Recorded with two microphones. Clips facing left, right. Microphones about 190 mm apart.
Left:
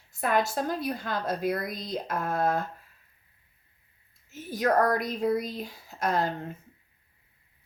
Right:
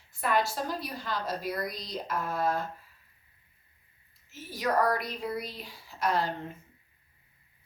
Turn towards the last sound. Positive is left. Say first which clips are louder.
# left 2 dB
turn(degrees=45)  # may be behind; listen again after turning